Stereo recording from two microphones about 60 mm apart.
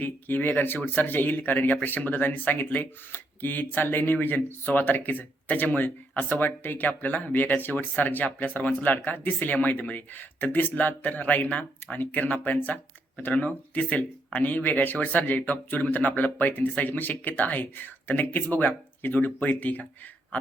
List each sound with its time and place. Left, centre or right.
0.0 s a man's voice: left